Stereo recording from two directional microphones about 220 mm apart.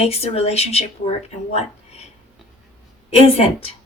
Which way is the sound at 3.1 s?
25° left (ahead or behind).